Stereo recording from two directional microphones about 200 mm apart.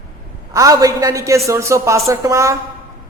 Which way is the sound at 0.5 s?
15° right (ahead or behind).